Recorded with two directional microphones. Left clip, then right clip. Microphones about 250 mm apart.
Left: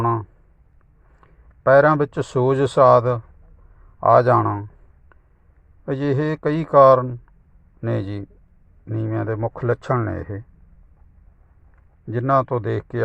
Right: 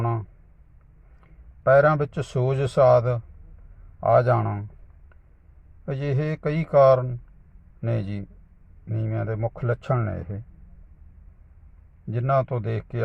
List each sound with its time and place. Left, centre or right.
1.6 s a man's voice: left
5.8 s a man's voice: left
12.1 s a man's voice: left